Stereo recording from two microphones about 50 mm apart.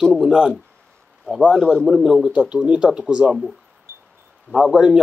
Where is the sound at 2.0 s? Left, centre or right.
Centre.